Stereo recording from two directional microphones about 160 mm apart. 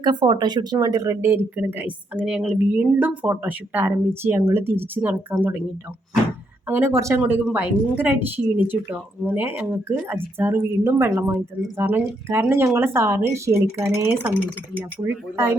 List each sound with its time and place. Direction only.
0.0 s speech: 25° right (ahead or behind); by 5.6 s 10° right (ahead or behind)
6.7 s speech: 15° right (ahead or behind)